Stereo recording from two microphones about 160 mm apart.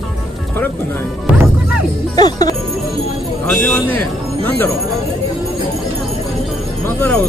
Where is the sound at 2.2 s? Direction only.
25° left (ahead or behind).